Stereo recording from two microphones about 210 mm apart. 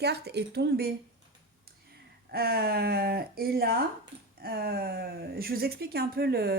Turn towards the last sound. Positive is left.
turn(degrees=-50)  # may be behind; listen again after turning